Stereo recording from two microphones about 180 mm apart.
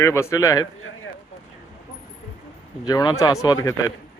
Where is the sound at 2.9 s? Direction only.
20° left (ahead or behind).